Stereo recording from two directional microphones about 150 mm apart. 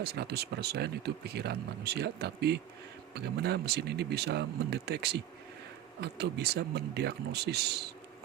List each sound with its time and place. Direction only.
0.0 s speech: 90° right